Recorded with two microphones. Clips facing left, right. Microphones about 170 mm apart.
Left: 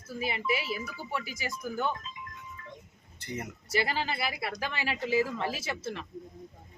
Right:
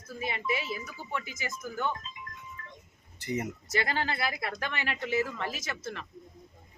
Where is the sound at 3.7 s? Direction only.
5° left (ahead or behind).